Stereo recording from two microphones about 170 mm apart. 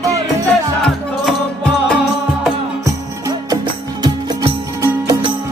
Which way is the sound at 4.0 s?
25° right (ahead or behind).